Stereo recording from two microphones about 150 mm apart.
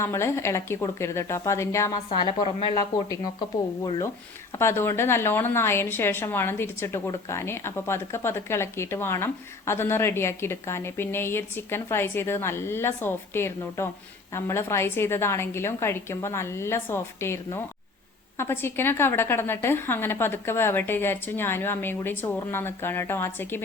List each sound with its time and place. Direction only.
0.0 s speech: 20° left (ahead or behind)
2.0 s a woman's voice: 30° left (ahead or behind)
3.8 s a woman's voice: 25° left (ahead or behind)